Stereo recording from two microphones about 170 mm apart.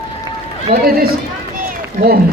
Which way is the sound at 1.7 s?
60° right (ahead or behind).